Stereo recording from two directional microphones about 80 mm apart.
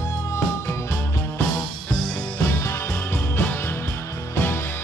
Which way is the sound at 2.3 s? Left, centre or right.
Left.